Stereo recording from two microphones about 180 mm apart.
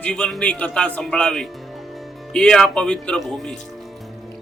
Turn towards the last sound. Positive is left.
turn(degrees=0)  # may be behind; listen again after turning